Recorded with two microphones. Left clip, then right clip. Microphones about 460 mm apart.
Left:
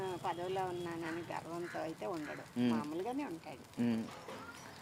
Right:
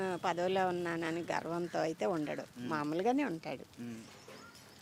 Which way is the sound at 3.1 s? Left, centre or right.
Right.